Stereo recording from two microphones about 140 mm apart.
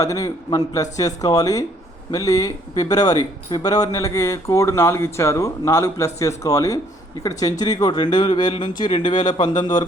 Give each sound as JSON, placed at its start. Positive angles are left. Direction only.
{"t": 0.0, "sound": "speech", "side_deg": 25}